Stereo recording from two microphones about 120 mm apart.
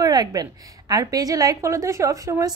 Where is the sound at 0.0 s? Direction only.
30° right (ahead or behind).